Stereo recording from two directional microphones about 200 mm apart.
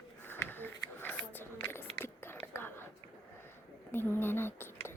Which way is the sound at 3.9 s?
10° left (ahead or behind).